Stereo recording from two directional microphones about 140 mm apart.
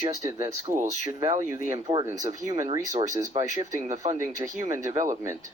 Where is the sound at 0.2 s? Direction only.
20° right (ahead or behind).